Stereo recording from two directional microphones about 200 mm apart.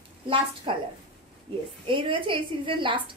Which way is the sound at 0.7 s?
25° right (ahead or behind).